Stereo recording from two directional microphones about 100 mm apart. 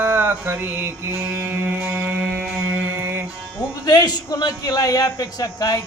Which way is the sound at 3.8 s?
40° left (ahead or behind).